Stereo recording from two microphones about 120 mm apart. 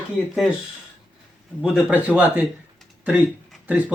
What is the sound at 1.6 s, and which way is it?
A man's voice, 5° right (ahead or behind).